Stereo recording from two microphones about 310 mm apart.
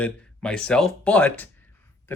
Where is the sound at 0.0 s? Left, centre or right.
Centre.